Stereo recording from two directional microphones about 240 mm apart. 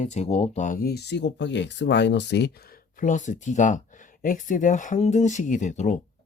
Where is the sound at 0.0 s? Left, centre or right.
Left.